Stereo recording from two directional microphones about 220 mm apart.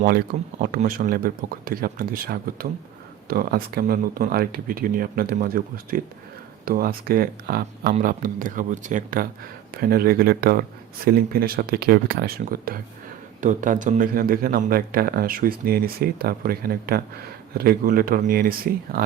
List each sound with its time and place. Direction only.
0.0 s a man's voice: 40° right (ahead or behind)